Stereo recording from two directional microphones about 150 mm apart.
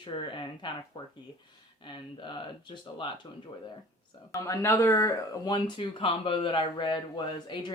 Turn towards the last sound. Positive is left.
turn(degrees=30)  # may be behind; listen again after turning